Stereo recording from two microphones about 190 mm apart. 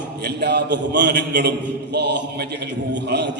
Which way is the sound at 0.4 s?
60° right (ahead or behind).